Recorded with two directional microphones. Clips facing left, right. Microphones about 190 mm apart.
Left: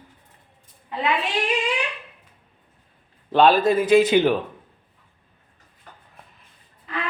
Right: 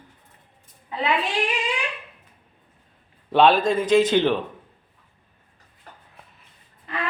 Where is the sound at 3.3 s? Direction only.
Centre (ahead or behind).